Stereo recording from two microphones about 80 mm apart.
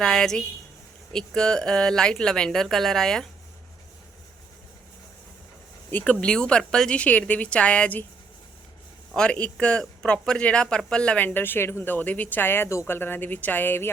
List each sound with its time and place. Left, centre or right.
0.0 s a woman's voice: centre
5.9 s speech: centre
9.1 s a woman's voice: centre